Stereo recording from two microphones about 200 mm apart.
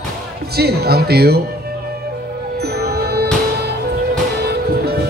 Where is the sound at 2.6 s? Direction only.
55° right (ahead or behind).